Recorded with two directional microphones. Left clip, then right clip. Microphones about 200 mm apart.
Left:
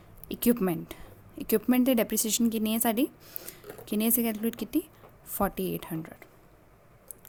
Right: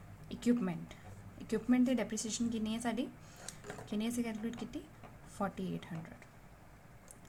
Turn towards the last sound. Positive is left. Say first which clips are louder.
# left 10 dB
turn(degrees=55)  # may be behind; listen again after turning